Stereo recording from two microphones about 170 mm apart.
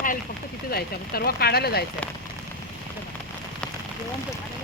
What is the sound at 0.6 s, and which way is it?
Speech, 65° left (ahead or behind).